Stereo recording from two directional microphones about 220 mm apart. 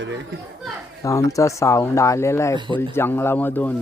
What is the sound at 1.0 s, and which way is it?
Speech, 15° left (ahead or behind).